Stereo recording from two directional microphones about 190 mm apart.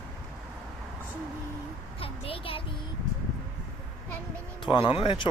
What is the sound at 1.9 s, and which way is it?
Speech, 30° left (ahead or behind).